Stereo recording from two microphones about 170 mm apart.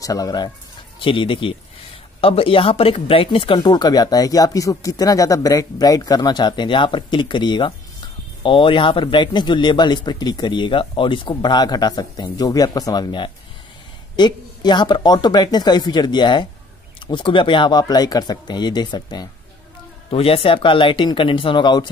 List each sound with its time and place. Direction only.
0.0 s speech: 20° left (ahead or behind)